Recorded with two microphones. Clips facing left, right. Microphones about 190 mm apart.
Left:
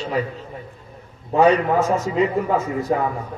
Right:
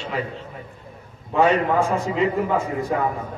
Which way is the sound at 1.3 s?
40° left (ahead or behind).